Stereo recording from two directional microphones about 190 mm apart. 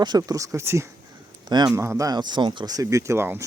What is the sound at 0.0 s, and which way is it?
Speech, 20° right (ahead or behind).